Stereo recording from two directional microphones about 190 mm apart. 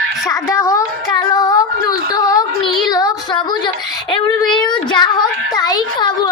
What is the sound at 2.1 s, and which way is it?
Child singing, 20° left (ahead or behind).